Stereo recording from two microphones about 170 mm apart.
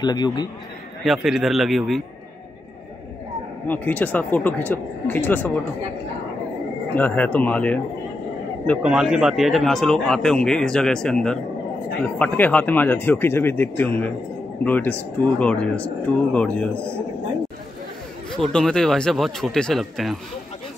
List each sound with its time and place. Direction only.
0.0 s a man's voice: 25° left (ahead or behind)
1.0 s speech: centre (ahead or behind)
3.6 s speech: 10° left (ahead or behind)
7.0 s speech: 10° left (ahead or behind)
8.8 s speech: 5° right (ahead or behind)
18.5 s speech: 5° left (ahead or behind)